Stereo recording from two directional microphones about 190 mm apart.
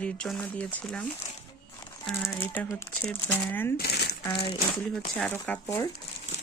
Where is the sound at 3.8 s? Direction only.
60° left (ahead or behind).